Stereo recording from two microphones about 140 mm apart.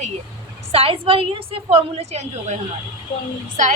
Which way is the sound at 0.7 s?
45° right (ahead or behind).